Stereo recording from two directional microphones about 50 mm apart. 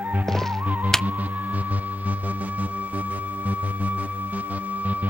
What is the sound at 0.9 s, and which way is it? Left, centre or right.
Hum, centre.